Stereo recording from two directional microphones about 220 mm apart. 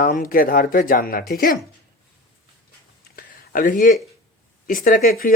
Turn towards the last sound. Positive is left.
turn(degrees=40)  # may be behind; listen again after turning